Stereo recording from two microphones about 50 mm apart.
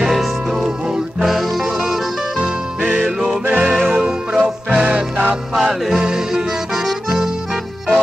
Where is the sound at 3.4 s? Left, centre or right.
Right.